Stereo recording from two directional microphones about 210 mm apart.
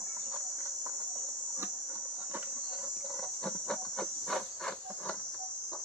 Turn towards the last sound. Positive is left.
turn(degrees=0)  # may be behind; listen again after turning